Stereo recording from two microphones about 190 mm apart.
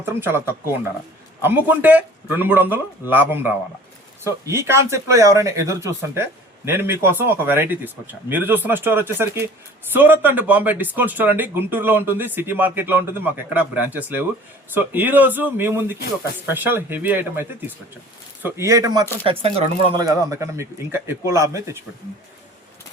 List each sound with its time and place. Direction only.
0.0 s speech: 10° right (ahead or behind)
19.2 s speech: 30° right (ahead or behind)
20.3 s speech: 15° right (ahead or behind)